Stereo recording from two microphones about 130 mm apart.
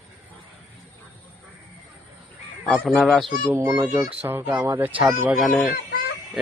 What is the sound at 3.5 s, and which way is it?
Speech, 20° right (ahead or behind).